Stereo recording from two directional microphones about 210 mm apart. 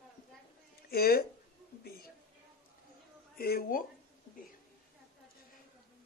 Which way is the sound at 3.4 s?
45° left (ahead or behind).